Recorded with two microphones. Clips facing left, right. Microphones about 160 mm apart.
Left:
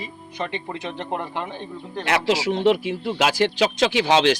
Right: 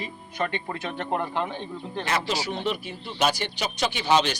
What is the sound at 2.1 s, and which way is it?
Speech, 85° left.